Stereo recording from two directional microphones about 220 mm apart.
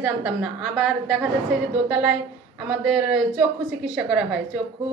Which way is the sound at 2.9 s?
5° right (ahead or behind).